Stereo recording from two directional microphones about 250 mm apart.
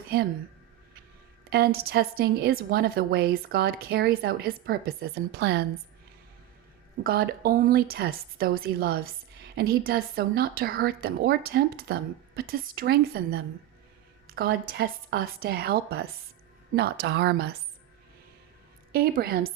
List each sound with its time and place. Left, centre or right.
1.5 s a woman's voice: right
7.0 s a woman's voice: right
18.9 s a woman's voice: right